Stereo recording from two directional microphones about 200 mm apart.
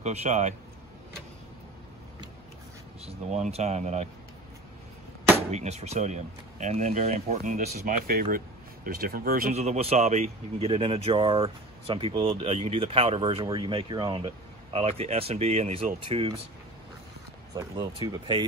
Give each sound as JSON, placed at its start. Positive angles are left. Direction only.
{"t": 0.0, "sound": "speech", "side_deg": -35}
{"t": 3.1, "sound": "speech", "side_deg": -35}
{"t": 5.5, "sound": "speech", "side_deg": -35}
{"t": 17.6, "sound": "speech", "side_deg": -20}